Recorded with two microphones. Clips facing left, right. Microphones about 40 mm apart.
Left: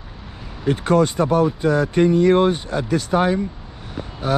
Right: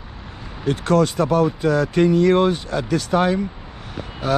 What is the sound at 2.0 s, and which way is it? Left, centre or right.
Speech, right.